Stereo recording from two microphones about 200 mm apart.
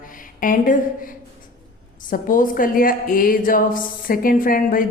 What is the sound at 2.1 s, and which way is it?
A woman's voice, 40° left (ahead or behind).